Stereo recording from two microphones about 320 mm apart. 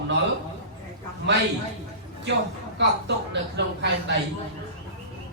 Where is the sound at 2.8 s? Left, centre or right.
Right.